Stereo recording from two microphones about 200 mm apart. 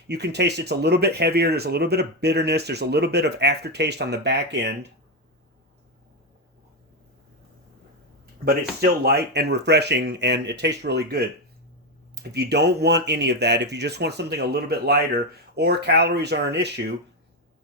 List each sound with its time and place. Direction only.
0.1 s speech: 55° right (ahead or behind)
8.4 s speech: 50° right (ahead or behind)